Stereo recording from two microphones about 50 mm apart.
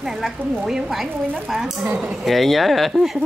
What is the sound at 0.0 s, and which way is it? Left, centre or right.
Speech, centre.